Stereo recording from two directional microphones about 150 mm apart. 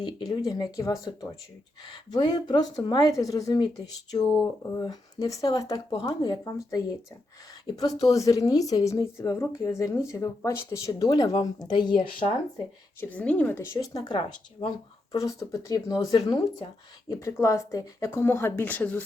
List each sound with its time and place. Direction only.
0.0 s a woman's voice: 25° left (ahead or behind)
13.0 s speech: 10° left (ahead or behind)
13.7 s a woman's voice: 30° left (ahead or behind); by 19.0 s 10° left (ahead or behind)